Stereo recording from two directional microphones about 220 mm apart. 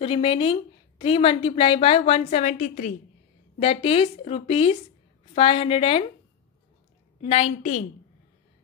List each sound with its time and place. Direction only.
0.0 s a woman's voice: 25° left (ahead or behind)
3.5 s a woman's voice: 25° left (ahead or behind)
7.2 s a woman's voice: 25° left (ahead or behind)